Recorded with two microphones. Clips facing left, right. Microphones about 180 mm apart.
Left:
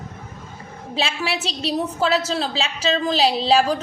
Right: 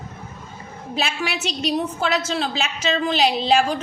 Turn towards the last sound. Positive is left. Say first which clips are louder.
# left 1 dB
turn(degrees=35)  # may be behind; listen again after turning